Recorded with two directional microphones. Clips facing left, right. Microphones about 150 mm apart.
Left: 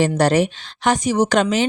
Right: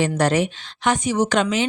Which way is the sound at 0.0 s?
35° left (ahead or behind).